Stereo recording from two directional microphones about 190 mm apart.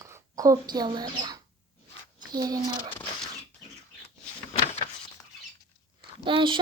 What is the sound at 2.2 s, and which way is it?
Speech, 20° right (ahead or behind).